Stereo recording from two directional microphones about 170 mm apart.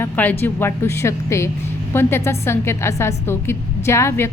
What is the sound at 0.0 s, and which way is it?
A woman's voice, 10° left (ahead or behind).